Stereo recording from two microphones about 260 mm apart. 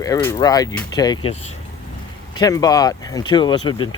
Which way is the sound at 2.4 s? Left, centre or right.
Centre.